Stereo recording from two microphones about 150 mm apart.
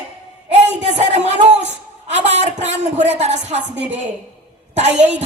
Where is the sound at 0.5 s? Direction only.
50° right (ahead or behind).